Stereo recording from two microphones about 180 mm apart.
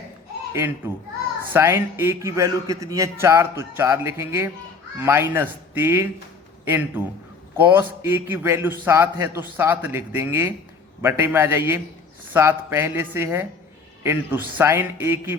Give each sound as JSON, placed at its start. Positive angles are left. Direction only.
{"t": 0.9, "sound": "a man's voice", "side_deg": -10}